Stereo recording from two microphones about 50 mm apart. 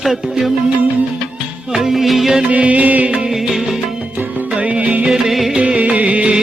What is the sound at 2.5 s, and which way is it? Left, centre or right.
Music, right.